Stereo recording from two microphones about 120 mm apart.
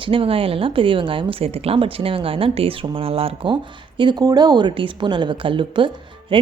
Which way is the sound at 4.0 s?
35° right (ahead or behind).